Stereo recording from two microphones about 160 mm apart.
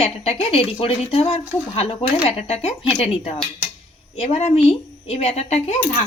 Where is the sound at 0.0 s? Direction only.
40° left (ahead or behind).